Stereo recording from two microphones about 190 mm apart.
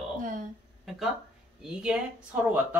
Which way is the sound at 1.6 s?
5° right (ahead or behind).